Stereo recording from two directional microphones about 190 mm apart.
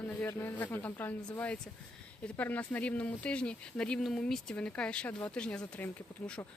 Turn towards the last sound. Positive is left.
turn(degrees=5)  # may be behind; listen again after turning